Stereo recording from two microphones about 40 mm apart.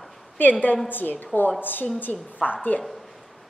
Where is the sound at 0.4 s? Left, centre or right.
Left.